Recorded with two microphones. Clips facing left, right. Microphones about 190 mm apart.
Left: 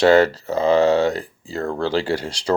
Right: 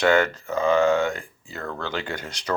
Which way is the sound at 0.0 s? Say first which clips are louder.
Left 6 dB; 35° left (ahead or behind).